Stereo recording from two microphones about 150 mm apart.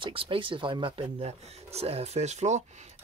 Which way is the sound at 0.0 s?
35° right (ahead or behind).